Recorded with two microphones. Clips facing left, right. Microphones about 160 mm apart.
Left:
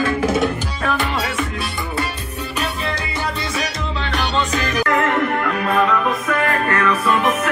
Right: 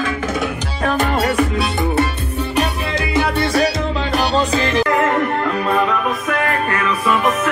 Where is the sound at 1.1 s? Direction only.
55° right (ahead or behind).